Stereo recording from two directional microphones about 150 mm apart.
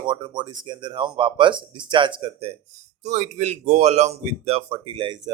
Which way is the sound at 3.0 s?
50° right (ahead or behind).